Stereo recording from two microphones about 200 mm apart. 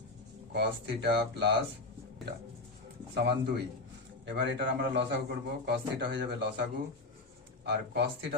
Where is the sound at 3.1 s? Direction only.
55° right (ahead or behind).